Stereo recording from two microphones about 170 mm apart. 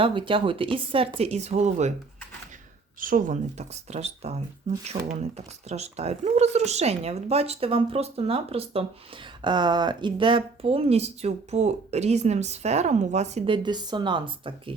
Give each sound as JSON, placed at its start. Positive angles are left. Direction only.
{"t": 0.0, "sound": "speech", "side_deg": -30}
{"t": 3.0, "sound": "speech", "side_deg": -55}